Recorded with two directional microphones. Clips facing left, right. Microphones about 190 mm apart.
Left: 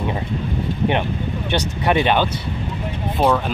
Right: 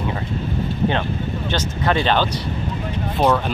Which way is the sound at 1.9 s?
15° left (ahead or behind).